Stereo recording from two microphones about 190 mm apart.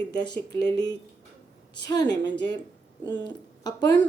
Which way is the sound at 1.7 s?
20° left (ahead or behind).